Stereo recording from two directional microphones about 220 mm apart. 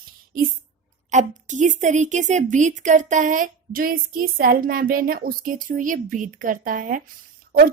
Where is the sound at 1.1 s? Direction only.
35° right (ahead or behind).